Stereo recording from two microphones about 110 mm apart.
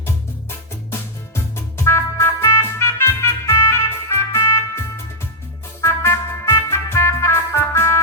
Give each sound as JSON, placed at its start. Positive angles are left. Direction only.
{"t": 1.5, "sound": "music", "side_deg": 25}
{"t": 5.8, "sound": "music", "side_deg": 25}